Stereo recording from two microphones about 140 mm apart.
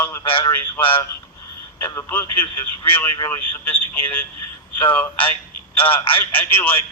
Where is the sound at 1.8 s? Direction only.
20° left (ahead or behind).